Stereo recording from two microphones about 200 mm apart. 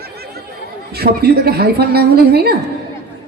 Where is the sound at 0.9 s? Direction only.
50° right (ahead or behind).